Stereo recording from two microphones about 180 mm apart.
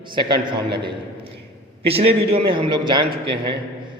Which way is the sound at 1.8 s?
30° right (ahead or behind).